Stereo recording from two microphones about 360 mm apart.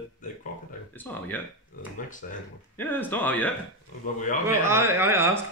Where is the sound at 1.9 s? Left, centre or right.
Left.